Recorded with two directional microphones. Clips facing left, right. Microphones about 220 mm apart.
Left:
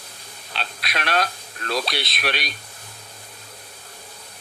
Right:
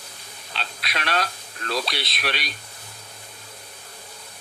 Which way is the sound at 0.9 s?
50° left (ahead or behind).